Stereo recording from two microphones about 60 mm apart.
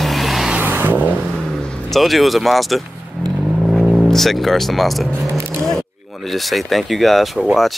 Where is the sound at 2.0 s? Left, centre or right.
Centre.